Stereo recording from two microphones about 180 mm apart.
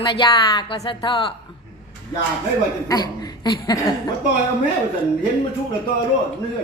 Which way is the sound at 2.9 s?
20° left (ahead or behind).